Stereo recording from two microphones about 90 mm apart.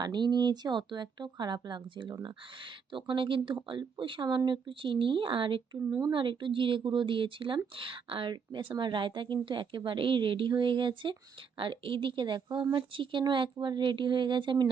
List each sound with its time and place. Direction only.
0.0 s speech: 55° right (ahead or behind)